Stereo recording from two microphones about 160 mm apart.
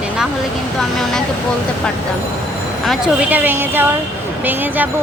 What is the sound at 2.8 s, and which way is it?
Speech, 5° right (ahead or behind).